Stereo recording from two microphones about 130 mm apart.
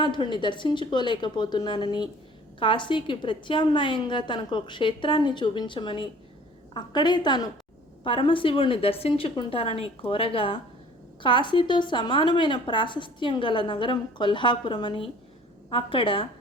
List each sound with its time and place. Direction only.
0.0 s a woman's voice: 40° left (ahead or behind)